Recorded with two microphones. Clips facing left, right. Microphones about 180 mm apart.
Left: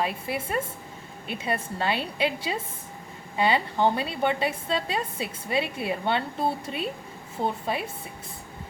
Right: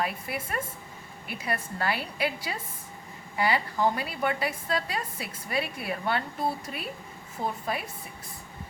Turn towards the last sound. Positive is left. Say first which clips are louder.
# left 3 dB
turn(degrees=25)  # may be behind; listen again after turning